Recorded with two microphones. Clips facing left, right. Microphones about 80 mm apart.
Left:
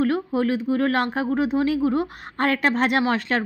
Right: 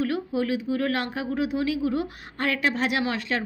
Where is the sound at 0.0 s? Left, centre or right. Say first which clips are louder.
Left 4 dB; left.